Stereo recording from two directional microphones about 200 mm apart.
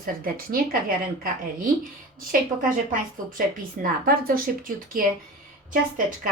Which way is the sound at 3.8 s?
45° right (ahead or behind).